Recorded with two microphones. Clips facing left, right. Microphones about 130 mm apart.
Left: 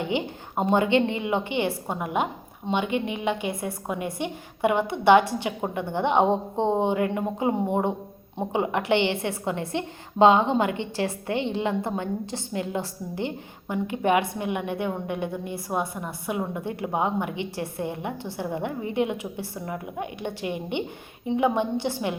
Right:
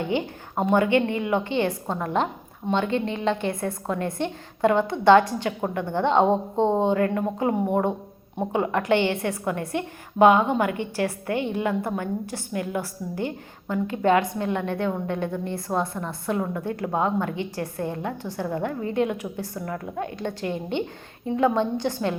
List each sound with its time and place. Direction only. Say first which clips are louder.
0.0 s a woman's voice: right 1 dB; 20° left (ahead or behind)